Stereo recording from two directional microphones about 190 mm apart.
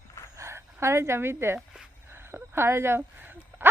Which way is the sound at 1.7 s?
10° right (ahead or behind).